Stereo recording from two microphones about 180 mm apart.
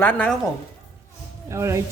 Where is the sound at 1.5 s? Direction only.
15° right (ahead or behind).